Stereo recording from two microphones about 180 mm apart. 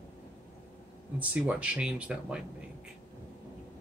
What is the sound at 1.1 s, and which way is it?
Speech, 5° right (ahead or behind).